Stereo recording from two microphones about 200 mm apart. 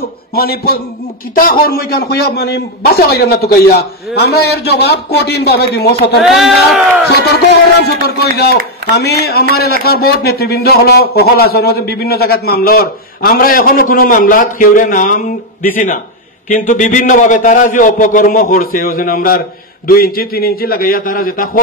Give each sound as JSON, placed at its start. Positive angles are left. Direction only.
{"t": 0.3, "sound": "a man's voice", "side_deg": 50}
{"t": 6.2, "sound": "a sound", "side_deg": 0}
{"t": 8.1, "sound": "a man's voice", "side_deg": 55}